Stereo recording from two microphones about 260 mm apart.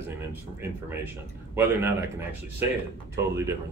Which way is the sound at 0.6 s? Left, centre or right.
Centre.